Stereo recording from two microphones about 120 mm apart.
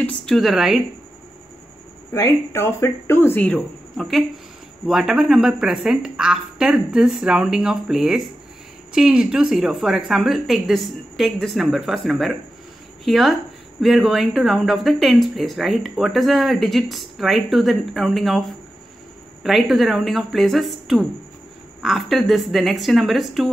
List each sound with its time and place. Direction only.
0.0 s a woman's voice: 5° left (ahead or behind)
2.1 s speech: 20° left (ahead or behind)
3.4 s speech: 5° left (ahead or behind)